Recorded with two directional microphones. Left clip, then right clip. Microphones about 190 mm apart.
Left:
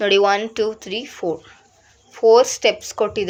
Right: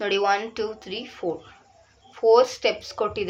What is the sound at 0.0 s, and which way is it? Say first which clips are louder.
Speech: left 7 dB; 35° left (ahead or behind).